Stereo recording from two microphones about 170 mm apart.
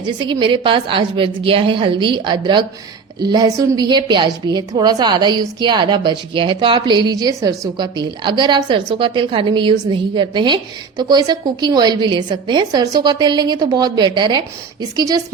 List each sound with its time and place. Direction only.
0.0 s a woman's voice: 25° right (ahead or behind)